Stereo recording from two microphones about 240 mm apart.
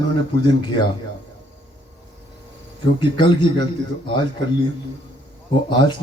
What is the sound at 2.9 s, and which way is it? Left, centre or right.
Speech, centre.